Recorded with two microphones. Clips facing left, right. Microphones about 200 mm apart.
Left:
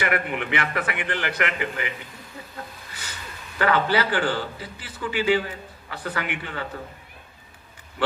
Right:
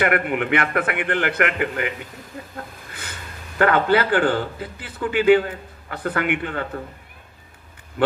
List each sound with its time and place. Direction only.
0.0 s a man's voice: 55° right (ahead or behind)